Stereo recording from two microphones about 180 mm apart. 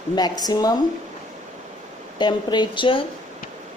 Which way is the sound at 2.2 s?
25° left (ahead or behind).